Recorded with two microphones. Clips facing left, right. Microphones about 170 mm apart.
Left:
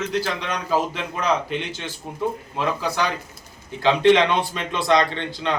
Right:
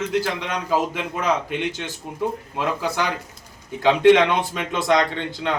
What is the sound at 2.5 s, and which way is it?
A man's voice, 15° right (ahead or behind).